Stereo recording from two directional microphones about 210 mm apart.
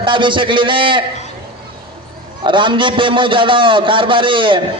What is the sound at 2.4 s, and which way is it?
A man's voice, 25° right (ahead or behind).